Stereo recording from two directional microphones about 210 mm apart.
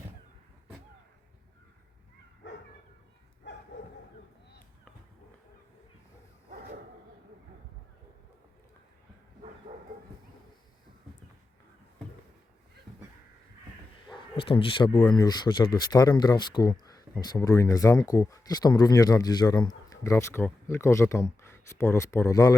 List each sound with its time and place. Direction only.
2.4 s dog: 60° left (ahead or behind)
9.7 s bow-wow: 35° right (ahead or behind)
14.1 s speech: 25° left (ahead or behind)